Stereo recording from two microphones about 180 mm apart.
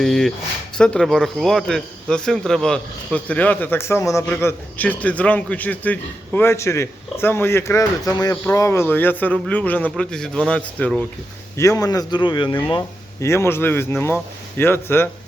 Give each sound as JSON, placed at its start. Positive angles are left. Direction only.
{"t": 0.0, "sound": "a man's voice", "side_deg": 0}
{"t": 11.5, "sound": "speech", "side_deg": 15}
{"t": 13.2, "sound": "a man's voice", "side_deg": 15}